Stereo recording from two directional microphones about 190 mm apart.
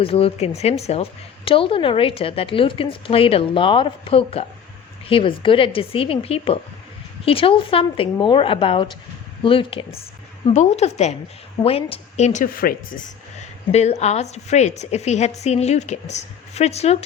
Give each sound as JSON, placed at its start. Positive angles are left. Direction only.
{"t": 0.0, "sound": "a woman's voice", "side_deg": 30}
{"t": 13.7, "sound": "a woman's voice", "side_deg": 35}